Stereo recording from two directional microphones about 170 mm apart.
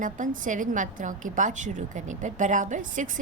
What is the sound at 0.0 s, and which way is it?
A woman's voice, 50° right (ahead or behind).